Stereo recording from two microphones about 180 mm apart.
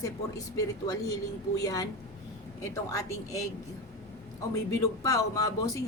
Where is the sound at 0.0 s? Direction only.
20° left (ahead or behind).